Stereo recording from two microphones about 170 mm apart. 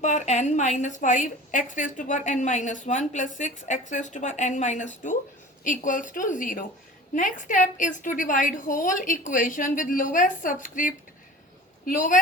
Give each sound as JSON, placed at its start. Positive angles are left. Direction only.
{"t": 0.0, "sound": "a woman's voice", "side_deg": 45}